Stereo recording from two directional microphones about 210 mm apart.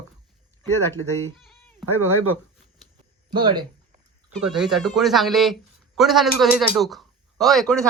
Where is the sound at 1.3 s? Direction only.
Centre (ahead or behind).